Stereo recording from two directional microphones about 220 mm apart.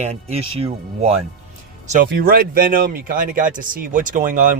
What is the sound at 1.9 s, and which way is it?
Speech, 40° right (ahead or behind).